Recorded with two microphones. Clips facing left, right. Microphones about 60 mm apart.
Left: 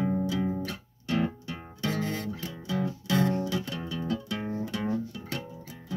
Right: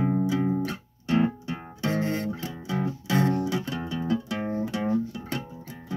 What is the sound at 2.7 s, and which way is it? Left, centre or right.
Music, right.